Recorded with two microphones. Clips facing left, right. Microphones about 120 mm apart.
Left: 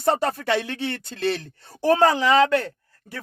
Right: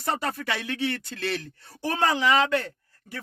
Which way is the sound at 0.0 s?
30° left (ahead or behind).